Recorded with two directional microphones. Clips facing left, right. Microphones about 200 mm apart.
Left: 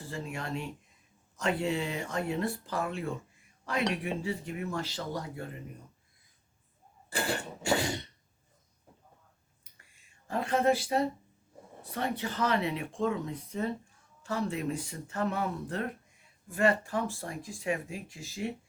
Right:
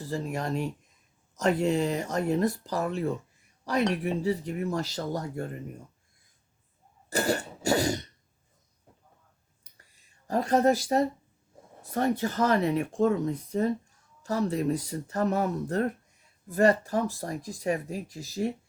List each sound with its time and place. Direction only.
0.0 s speech: 40° right (ahead or behind)
7.1 s cough: 40° right (ahead or behind)
9.9 s speech: 40° right (ahead or behind)